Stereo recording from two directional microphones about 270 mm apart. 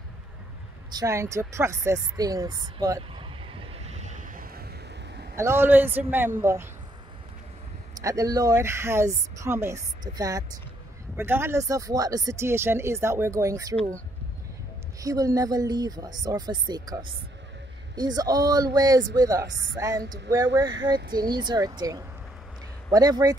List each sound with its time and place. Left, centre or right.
0.9 s a sound: centre; by 4.6 s right
5.3 s speech: centre
8.0 s speech: centre
15.0 s speech: centre
20.0 s speech: right
21.2 s speech: centre